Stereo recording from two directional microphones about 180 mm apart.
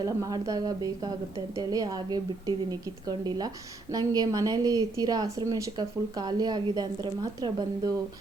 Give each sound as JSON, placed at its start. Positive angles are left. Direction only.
{"t": 0.0, "sound": "a woman's voice", "side_deg": -20}